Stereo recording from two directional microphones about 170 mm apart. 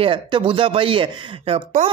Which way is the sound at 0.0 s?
30° right (ahead or behind).